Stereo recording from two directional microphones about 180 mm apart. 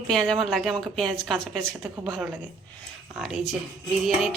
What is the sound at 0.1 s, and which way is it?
Speech, centre (ahead or behind).